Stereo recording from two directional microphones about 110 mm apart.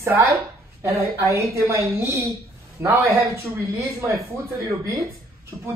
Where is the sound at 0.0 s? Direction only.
25° right (ahead or behind).